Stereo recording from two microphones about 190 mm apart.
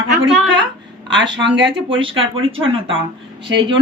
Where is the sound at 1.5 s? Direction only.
25° right (ahead or behind).